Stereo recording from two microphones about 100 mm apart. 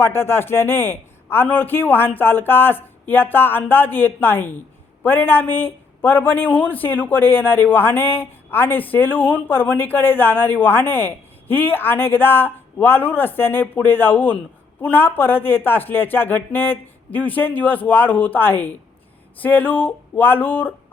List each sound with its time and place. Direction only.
0.0 s speech: 25° left (ahead or behind)